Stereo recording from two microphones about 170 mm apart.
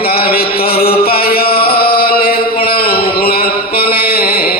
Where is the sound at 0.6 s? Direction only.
65° left (ahead or behind).